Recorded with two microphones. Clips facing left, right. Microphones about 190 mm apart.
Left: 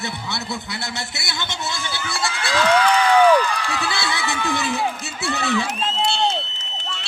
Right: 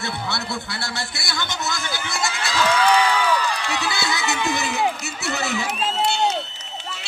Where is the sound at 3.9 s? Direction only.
30° left (ahead or behind).